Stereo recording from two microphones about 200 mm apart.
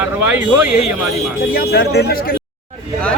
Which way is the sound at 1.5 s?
50° left (ahead or behind).